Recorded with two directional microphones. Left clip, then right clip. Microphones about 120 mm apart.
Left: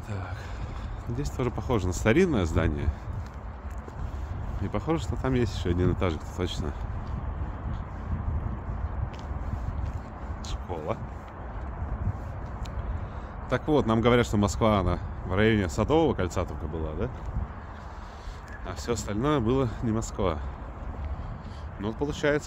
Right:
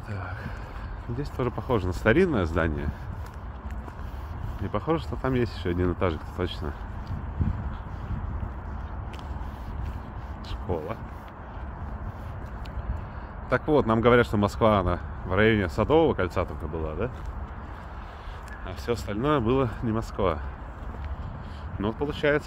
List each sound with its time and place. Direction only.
1.1 s speech: 25° left (ahead or behind)
4.6 s speech: 20° left (ahead or behind)
10.7 s speech: 25° left (ahead or behind)
13.5 s speech: 15° left (ahead or behind)
18.7 s speech: 10° left (ahead or behind)
21.8 s speech: 10° left (ahead or behind)